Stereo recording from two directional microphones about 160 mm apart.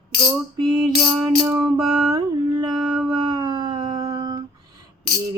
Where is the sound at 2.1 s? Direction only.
25° right (ahead or behind).